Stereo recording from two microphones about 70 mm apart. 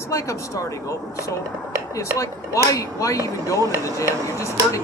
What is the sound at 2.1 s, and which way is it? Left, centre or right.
Speech, left.